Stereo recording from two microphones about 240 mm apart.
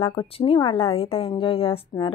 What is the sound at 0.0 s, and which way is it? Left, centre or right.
A woman's voice, left.